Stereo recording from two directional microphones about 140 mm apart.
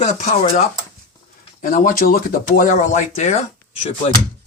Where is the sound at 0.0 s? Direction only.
55° left (ahead or behind).